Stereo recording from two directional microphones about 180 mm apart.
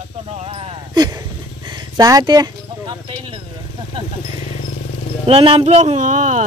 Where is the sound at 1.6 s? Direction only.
25° right (ahead or behind).